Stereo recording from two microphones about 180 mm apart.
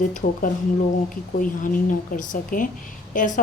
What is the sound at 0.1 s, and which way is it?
A woman's voice, 50° left (ahead or behind).